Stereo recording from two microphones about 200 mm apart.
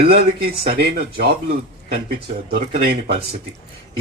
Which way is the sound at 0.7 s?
50° right (ahead or behind).